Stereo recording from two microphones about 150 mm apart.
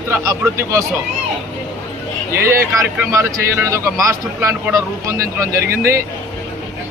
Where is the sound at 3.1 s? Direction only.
20° right (ahead or behind).